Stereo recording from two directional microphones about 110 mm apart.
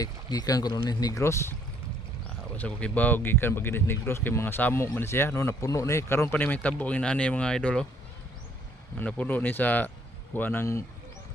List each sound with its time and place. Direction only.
0.0 s speech: 35° left (ahead or behind)
2.6 s speech: 10° left (ahead or behind)
9.0 s speech: 15° left (ahead or behind)